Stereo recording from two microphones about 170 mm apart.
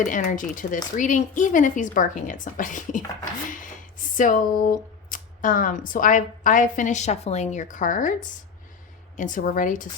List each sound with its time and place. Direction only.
0.0 s speech: 50° left (ahead or behind)